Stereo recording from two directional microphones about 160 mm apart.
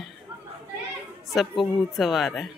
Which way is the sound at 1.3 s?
Centre (ahead or behind).